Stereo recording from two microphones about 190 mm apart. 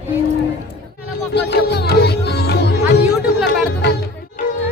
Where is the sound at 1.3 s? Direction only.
60° left (ahead or behind).